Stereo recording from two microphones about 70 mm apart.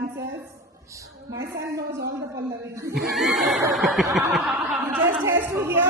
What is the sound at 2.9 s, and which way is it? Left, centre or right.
Snicker, centre.